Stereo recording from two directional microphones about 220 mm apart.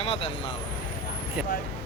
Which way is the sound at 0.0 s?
25° left (ahead or behind).